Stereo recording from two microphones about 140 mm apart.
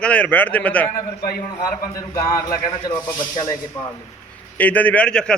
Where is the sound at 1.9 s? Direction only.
25° left (ahead or behind).